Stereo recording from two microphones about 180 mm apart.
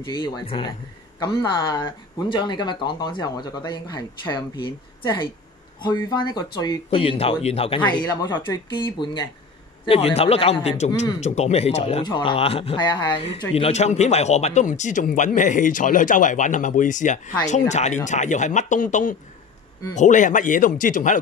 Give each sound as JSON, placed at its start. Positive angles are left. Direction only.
{"t": 0.1, "sound": "speech", "side_deg": 30}
{"t": 7.9, "sound": "speech", "side_deg": 25}